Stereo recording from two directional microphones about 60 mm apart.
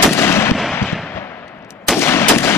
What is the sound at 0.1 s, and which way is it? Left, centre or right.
Artillery fire, left.